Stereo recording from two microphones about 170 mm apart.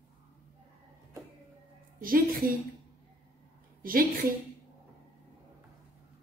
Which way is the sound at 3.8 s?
55° right (ahead or behind).